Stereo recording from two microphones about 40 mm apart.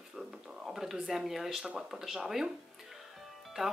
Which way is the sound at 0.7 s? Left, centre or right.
Centre.